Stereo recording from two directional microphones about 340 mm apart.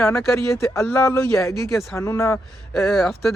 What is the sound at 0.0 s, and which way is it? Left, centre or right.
Speech, centre.